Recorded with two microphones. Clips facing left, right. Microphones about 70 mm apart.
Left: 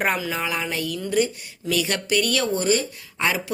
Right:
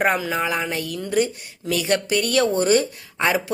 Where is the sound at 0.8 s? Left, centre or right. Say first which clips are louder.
Left 2 dB; right.